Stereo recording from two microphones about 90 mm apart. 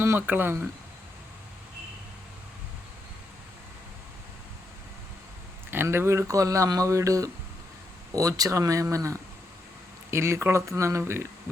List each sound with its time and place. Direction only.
0.0 s speech: 25° right (ahead or behind)
5.7 s speech: 25° right (ahead or behind)